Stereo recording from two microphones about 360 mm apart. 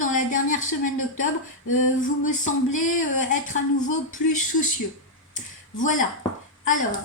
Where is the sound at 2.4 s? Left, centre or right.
Left.